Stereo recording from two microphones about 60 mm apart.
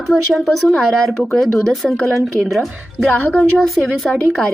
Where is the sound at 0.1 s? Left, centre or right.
Centre.